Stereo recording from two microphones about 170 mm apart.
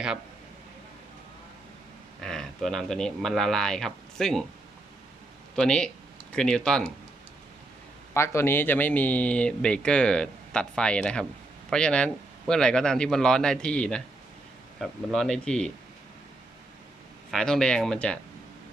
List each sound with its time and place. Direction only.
2.2 s a man's voice: 5° left (ahead or behind)
5.5 s a man's voice: 5° left (ahead or behind)
8.1 s a man's voice: 15° left (ahead or behind)
17.3 s a man's voice: 5° left (ahead or behind)